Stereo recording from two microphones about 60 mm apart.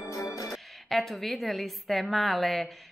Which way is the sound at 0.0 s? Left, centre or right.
Left.